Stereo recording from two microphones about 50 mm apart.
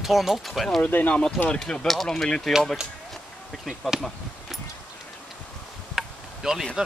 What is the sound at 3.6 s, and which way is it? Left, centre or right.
Speech, centre.